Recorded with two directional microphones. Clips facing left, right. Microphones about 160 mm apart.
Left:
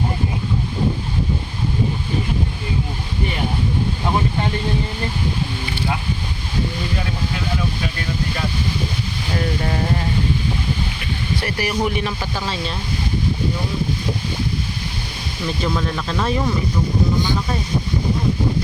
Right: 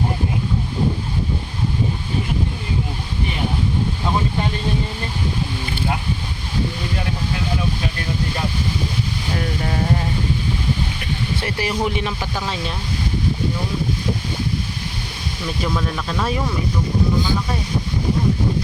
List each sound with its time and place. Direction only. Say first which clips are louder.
11.3 s speech: left 2 dB; 25° right (ahead or behind)
15.6 s speech: even; centre (ahead or behind)